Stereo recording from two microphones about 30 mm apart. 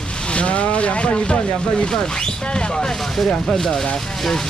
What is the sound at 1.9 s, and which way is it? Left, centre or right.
Speech, left.